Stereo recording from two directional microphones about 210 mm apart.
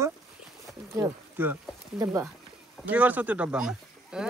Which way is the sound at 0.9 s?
10° right (ahead or behind).